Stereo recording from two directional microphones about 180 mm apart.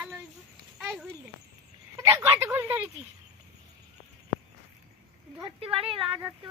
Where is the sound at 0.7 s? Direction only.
Centre (ahead or behind).